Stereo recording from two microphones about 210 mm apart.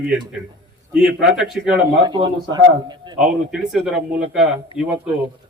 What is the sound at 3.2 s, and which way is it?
A man's voice, centre (ahead or behind).